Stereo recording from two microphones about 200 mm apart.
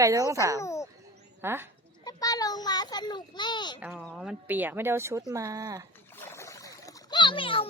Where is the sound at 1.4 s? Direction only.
10° right (ahead or behind).